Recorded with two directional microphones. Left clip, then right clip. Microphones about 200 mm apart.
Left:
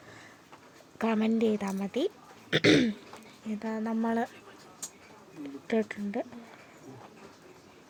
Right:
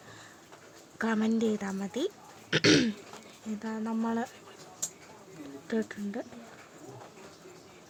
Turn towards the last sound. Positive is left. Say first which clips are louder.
# left 3 dB
turn(degrees=15)  # may be behind; listen again after turning